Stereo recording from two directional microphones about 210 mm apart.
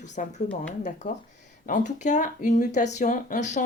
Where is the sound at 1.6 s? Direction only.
35° left (ahead or behind).